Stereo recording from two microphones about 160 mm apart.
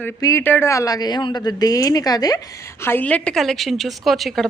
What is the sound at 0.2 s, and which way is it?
Speech, 20° left (ahead or behind).